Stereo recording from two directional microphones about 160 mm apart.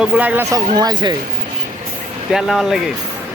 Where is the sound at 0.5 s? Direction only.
25° right (ahead or behind).